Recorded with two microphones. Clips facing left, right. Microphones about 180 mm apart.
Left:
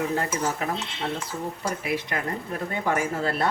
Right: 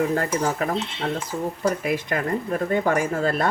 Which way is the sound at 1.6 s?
50° right (ahead or behind).